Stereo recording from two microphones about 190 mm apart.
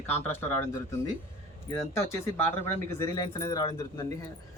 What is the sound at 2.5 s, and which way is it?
Speech, 15° left (ahead or behind).